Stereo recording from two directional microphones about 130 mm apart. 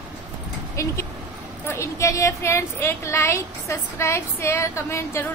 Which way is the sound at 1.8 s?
25° left (ahead or behind).